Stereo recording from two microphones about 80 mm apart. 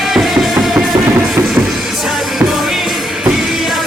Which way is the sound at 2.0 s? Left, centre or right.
Centre.